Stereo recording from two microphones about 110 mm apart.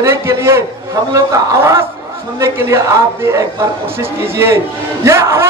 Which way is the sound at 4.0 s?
20° right (ahead or behind).